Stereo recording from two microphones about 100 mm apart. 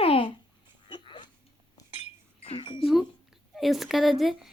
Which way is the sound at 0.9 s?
50° left (ahead or behind).